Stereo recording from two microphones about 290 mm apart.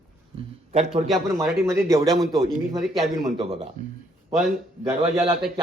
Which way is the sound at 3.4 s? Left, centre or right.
Centre.